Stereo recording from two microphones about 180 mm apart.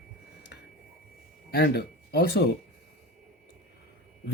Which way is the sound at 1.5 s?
60° left (ahead or behind).